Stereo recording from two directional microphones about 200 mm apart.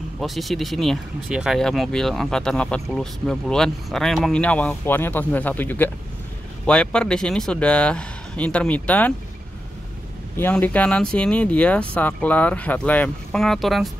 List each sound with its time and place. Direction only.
0.2 s speech: centre (ahead or behind)
10.3 s speech: 10° left (ahead or behind)